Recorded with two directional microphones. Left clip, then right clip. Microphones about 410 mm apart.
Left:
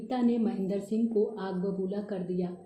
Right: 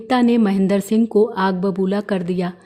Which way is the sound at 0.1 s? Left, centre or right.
Right.